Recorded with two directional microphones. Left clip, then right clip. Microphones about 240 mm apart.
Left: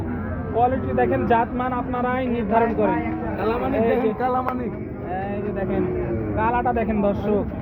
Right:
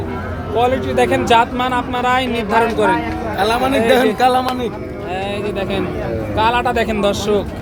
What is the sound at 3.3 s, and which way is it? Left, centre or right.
Speech, right.